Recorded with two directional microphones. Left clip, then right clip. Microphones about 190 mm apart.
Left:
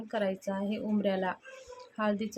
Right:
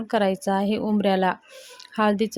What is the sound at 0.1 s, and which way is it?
Speech, 50° right (ahead or behind).